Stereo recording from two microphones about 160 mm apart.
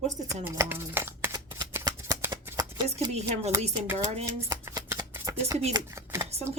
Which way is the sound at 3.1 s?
45° right (ahead or behind).